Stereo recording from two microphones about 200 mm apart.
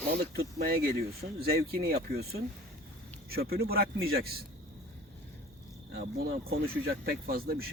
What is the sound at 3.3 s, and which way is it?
Speech, 50° right (ahead or behind).